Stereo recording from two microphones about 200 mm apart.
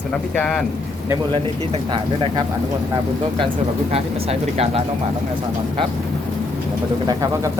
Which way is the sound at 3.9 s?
30° right (ahead or behind).